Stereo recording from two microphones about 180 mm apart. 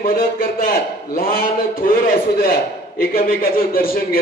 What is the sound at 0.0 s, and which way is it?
A man's voice, 55° left (ahead or behind).